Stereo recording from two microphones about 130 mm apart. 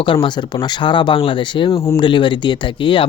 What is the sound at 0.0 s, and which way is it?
Speech, 40° left (ahead or behind).